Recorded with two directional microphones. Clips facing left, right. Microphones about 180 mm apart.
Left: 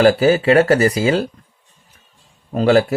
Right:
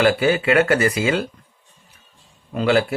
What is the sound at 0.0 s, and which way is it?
Speech, 35° left (ahead or behind).